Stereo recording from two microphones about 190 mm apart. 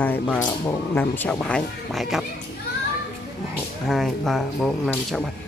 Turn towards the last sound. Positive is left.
turn(degrees=0)  # may be behind; listen again after turning